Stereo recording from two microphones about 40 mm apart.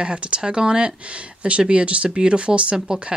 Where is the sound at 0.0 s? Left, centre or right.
Right.